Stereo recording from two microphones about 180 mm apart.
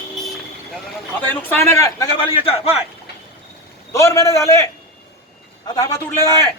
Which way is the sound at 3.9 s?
15° left (ahead or behind).